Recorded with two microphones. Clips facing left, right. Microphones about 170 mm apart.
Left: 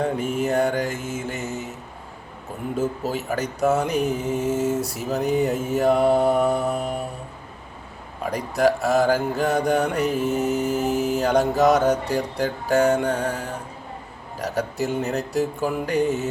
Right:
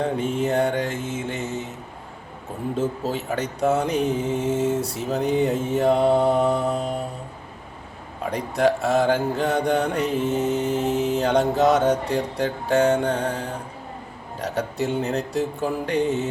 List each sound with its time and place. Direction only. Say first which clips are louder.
0.0 s speech: even; 30° right (ahead or behind)
2.7 s speech: left 1 dB; 30° right (ahead or behind)
8.3 s speech: even; 30° right (ahead or behind)